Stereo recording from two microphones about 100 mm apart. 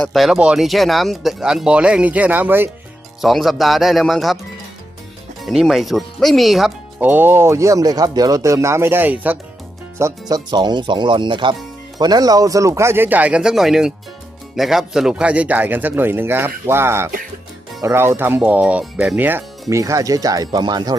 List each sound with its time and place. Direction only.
0.1 s speech: centre (ahead or behind); by 2.6 s 20° right (ahead or behind)
3.2 s speech: centre (ahead or behind)
5.4 s speech: centre (ahead or behind)
7.0 s speech: 20° right (ahead or behind)
10.0 s speech: 40° right (ahead or behind)
11.9 s a man's voice: 45° right (ahead or behind); by 19.4 s 15° right (ahead or behind)
19.7 s speech: 35° right (ahead or behind)